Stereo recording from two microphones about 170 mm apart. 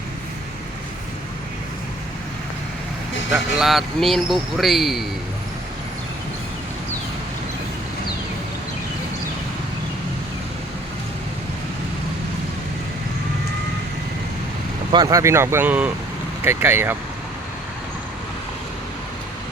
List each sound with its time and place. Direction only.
3.3 s speech: centre (ahead or behind)
14.9 s speech: 20° right (ahead or behind)